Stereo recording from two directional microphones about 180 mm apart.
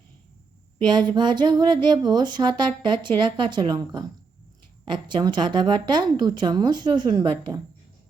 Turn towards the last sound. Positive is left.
turn(degrees=-25)  # may be behind; listen again after turning